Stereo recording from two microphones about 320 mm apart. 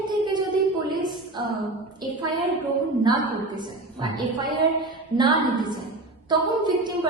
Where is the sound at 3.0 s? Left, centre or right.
Centre.